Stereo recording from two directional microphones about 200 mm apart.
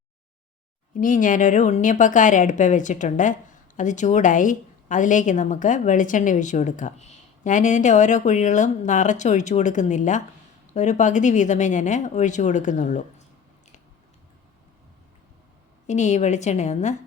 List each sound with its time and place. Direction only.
0.9 s a woman's voice: 40° left (ahead or behind)
15.9 s a woman's voice: 35° left (ahead or behind)